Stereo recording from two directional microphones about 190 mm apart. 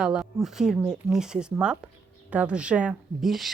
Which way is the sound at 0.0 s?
5° right (ahead or behind).